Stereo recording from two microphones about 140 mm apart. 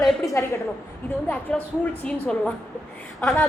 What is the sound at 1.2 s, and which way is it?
A woman's voice, 10° left (ahead or behind).